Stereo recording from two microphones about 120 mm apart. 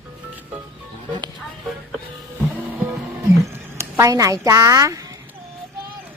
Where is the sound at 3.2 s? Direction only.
25° right (ahead or behind).